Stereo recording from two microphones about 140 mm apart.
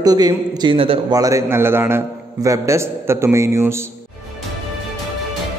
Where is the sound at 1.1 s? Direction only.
25° right (ahead or behind).